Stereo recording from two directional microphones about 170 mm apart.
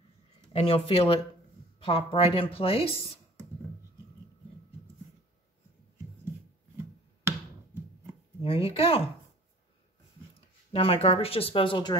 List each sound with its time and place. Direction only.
0.5 s a woman's voice: 30° left (ahead or behind)
8.4 s a woman's voice: 35° left (ahead or behind)
10.7 s a woman's voice: 35° left (ahead or behind)